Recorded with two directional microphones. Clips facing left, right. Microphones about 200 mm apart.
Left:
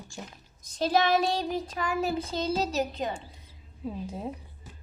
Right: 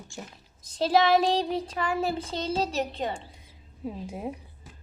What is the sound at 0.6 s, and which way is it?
Child singing, 30° right (ahead or behind).